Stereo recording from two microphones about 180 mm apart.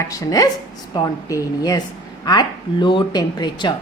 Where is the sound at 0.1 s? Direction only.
20° left (ahead or behind).